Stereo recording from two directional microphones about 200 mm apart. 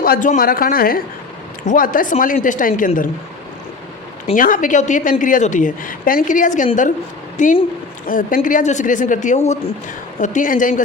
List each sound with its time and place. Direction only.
0.0 s a woman's voice: 45° left (ahead or behind)
4.4 s a woman's voice: 40° left (ahead or behind)